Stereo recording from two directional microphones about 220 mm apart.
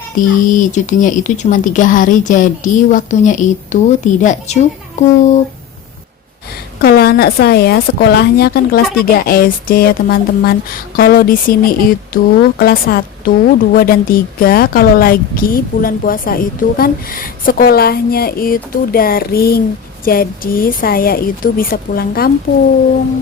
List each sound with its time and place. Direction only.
0.2 s speech: 35° left (ahead or behind)
6.8 s speech: 45° left (ahead or behind)